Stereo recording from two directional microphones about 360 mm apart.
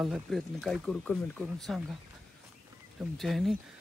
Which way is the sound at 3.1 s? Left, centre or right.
Centre.